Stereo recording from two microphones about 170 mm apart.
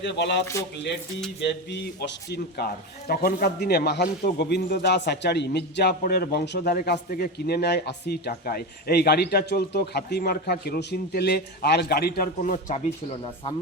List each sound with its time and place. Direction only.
0.0 s speech: 90° left
1.4 s a man's voice: 75° left (ahead or behind); by 13.5 s 35° left (ahead or behind)